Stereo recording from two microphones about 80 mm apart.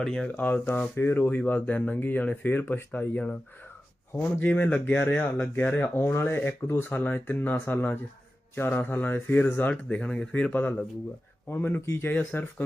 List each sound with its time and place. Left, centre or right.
0.0 s speech: centre
0.3 s speech: left